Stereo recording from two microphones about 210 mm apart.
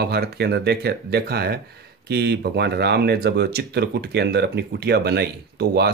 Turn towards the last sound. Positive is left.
turn(degrees=-50)  # may be behind; listen again after turning